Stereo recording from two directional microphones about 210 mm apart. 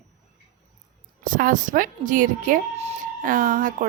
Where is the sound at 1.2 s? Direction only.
40° right (ahead or behind).